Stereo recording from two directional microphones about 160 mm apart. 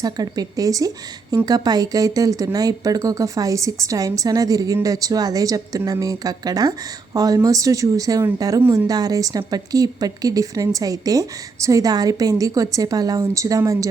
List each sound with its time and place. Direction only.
0.0 s speech: 25° right (ahead or behind)